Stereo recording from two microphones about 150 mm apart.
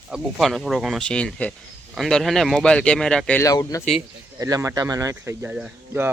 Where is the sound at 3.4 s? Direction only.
20° left (ahead or behind).